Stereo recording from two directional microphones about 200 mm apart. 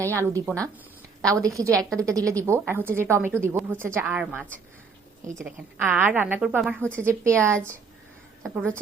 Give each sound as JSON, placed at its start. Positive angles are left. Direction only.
{"t": 0.0, "sound": "a woman's voice", "side_deg": -15}
{"t": 8.4, "sound": "a woman's voice", "side_deg": 0}